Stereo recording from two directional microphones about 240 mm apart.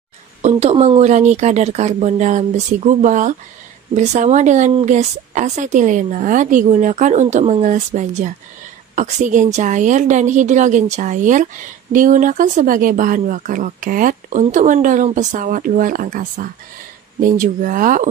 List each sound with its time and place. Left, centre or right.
0.4 s speech: right